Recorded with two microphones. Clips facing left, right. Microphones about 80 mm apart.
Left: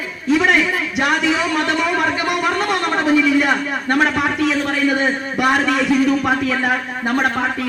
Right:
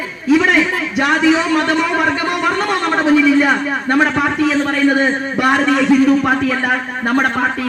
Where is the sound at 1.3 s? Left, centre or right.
Right.